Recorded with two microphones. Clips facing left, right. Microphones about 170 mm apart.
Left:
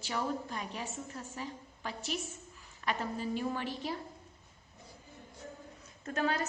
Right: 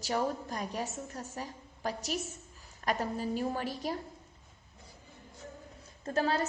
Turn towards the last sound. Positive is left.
turn(degrees=-35)  # may be behind; listen again after turning